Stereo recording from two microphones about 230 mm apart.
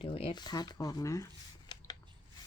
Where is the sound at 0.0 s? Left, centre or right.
Left.